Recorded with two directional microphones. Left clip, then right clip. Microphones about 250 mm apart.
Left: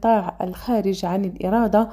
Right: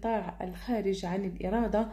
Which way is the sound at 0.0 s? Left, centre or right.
Left.